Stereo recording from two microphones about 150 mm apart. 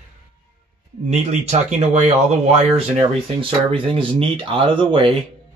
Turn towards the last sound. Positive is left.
turn(degrees=-35)  # may be behind; listen again after turning